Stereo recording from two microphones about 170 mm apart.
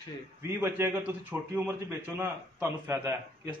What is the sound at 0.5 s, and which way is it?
A man's voice, 15° right (ahead or behind).